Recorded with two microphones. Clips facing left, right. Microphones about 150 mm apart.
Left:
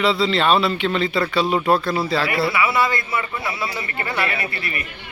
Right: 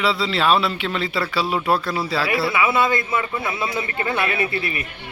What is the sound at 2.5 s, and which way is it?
A man's voice, 20° right (ahead or behind).